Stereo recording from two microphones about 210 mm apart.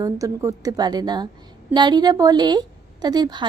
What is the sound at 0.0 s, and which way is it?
A woman's voice, 15° right (ahead or behind).